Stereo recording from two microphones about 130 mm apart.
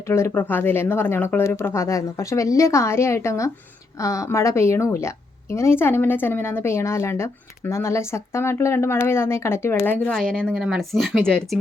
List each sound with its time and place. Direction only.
0.1 s a woman's voice: 15° left (ahead or behind)
10.1 s a woman's voice: 5° left (ahead or behind)